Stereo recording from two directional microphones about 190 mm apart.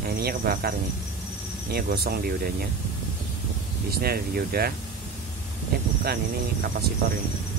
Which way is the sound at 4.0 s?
55° right (ahead or behind).